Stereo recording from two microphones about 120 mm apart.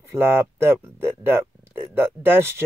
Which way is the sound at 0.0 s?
20° right (ahead or behind).